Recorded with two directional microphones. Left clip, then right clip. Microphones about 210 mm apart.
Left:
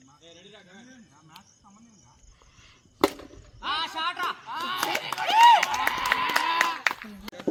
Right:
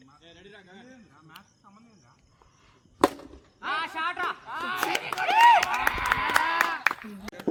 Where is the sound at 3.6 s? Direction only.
50° left (ahead or behind).